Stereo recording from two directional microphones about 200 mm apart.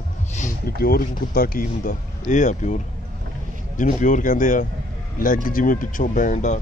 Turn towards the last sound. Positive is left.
turn(degrees=40)  # may be behind; listen again after turning